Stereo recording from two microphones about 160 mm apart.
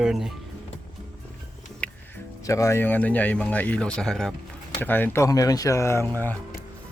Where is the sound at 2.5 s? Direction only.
20° left (ahead or behind).